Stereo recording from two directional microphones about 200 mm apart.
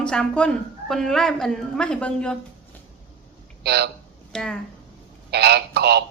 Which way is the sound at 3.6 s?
55° right (ahead or behind).